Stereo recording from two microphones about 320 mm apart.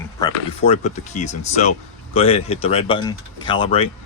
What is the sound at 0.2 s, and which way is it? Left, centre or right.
Speech, centre.